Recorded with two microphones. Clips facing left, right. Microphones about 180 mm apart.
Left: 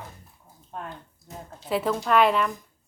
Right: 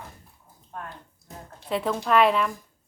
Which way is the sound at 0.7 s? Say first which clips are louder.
Left 2 dB; 25° left (ahead or behind).